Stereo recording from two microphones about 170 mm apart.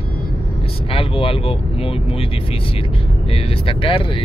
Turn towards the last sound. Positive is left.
turn(degrees=30)  # may be behind; listen again after turning